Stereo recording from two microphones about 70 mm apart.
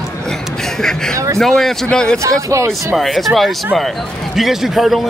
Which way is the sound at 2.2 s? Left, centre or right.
Right.